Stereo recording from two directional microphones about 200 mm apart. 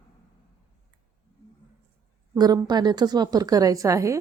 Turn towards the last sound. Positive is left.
turn(degrees=-15)  # may be behind; listen again after turning